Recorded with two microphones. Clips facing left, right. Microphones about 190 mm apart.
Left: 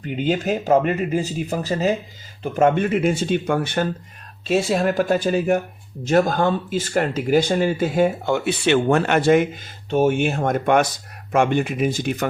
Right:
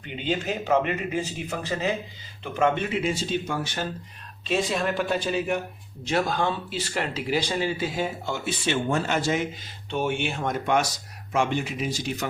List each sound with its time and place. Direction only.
0.0 s speech: 40° left (ahead or behind)
4.4 s speech: 45° left (ahead or behind)
9.9 s speech: 45° left (ahead or behind)